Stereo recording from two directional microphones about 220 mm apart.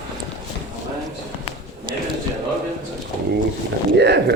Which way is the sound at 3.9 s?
50° right (ahead or behind).